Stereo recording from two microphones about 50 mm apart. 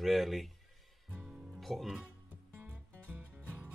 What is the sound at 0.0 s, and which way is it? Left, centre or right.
Speech, centre.